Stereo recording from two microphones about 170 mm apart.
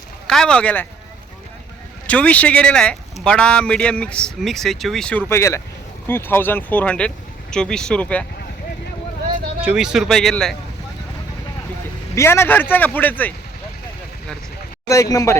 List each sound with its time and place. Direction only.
0.3 s speech: 5° left (ahead or behind)
2.0 s speech: 10° left (ahead or behind)
9.6 s speech: 5° right (ahead or behind)
12.1 s speech: 15° left (ahead or behind)
15.1 s speech: 20° left (ahead or behind)